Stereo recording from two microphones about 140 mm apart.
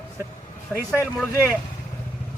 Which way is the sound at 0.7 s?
10° left (ahead or behind).